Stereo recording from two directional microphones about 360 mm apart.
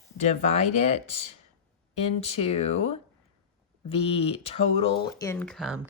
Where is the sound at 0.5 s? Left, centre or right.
Centre.